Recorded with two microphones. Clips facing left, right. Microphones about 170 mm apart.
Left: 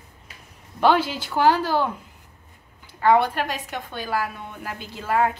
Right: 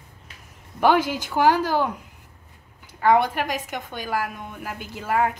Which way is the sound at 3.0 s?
15° right (ahead or behind).